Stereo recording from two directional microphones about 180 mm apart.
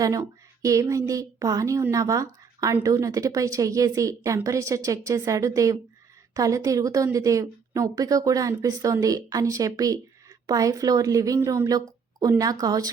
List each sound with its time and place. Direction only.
0.0 s a woman's voice: 20° right (ahead or behind)